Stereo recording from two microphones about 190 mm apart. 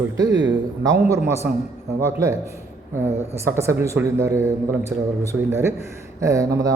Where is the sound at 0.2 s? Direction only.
20° right (ahead or behind).